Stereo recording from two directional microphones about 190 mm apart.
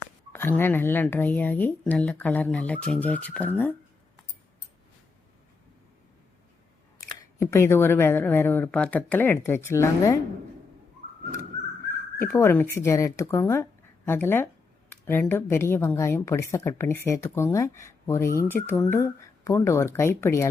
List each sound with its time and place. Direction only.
0.3 s speech: 10° left (ahead or behind)
7.1 s speech: 15° left (ahead or behind)
12.2 s speech: 10° left (ahead or behind)